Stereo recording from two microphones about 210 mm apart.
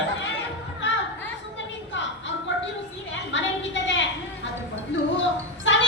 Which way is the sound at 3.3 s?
60° left (ahead or behind).